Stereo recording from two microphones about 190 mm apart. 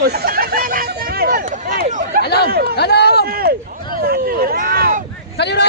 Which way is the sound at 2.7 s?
60° left (ahead or behind).